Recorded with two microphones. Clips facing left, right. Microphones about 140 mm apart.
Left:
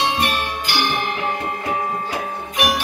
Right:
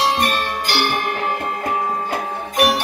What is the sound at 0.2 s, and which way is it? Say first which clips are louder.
Music: right 2 dB; 40° right (ahead or behind).